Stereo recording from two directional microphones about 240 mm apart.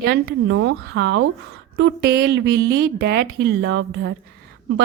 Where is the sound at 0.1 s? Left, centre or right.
Right.